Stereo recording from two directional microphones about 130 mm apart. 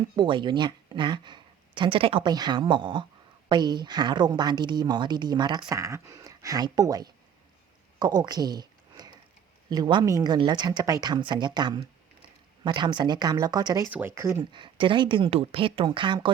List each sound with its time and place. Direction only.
0.2 s a woman's voice: 40° right (ahead or behind)
7.9 s a sound: 30° right (ahead or behind)
9.6 s a woman's voice: 35° right (ahead or behind)
13.9 s speech: 20° right (ahead or behind)
14.5 s a woman's voice: 40° right (ahead or behind)